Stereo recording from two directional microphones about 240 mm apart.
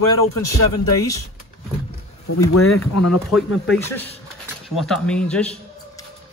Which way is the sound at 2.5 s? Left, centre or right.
Left.